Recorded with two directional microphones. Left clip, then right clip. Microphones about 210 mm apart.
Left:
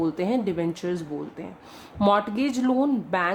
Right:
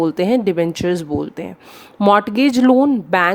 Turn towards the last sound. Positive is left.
turn(degrees=-45)  # may be behind; listen again after turning